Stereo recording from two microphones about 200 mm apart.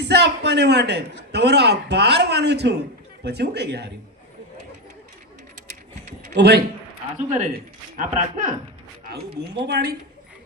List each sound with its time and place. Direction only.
0.0 s a sound: 55° right (ahead or behind)
1.3 s a man's voice: 55° right (ahead or behind)
6.3 s speech: 55° right (ahead or behind)
7.3 s speech: 35° right (ahead or behind)
9.0 s speech: 50° right (ahead or behind)